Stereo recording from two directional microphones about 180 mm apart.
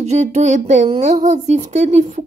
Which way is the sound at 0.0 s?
40° right (ahead or behind).